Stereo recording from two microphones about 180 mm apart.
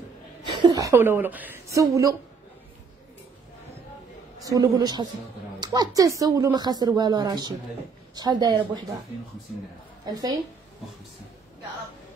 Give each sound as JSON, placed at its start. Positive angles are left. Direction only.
{"t": 0.6, "sound": "a woman's voice", "side_deg": -20}
{"t": 4.4, "sound": "speech", "side_deg": -20}
{"t": 10.1, "sound": "speech", "side_deg": -20}